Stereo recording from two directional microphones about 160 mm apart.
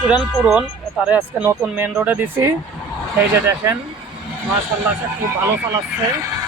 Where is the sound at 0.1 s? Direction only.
5° right (ahead or behind).